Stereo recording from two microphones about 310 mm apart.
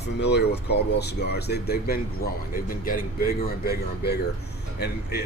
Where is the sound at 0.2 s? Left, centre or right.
Left.